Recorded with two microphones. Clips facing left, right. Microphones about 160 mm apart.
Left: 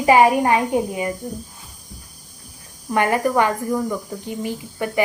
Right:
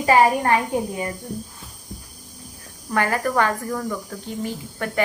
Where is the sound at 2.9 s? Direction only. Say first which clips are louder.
Left 3 dB; 20° left (ahead or behind).